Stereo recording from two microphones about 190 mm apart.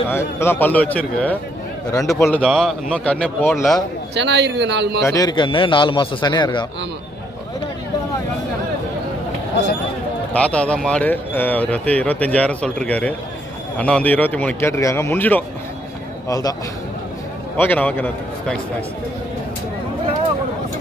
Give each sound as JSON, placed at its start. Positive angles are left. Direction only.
{"t": 0.1, "sound": "speech", "side_deg": 15}
{"t": 2.4, "sound": "speech", "side_deg": 0}
{"t": 4.1, "sound": "a man's voice", "side_deg": -65}
{"t": 5.0, "sound": "a man's voice", "side_deg": 20}
{"t": 10.3, "sound": "speech", "side_deg": 5}
{"t": 17.6, "sound": "speech", "side_deg": 10}